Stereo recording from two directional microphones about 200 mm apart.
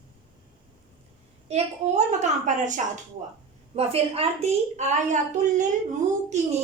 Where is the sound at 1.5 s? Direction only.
30° right (ahead or behind).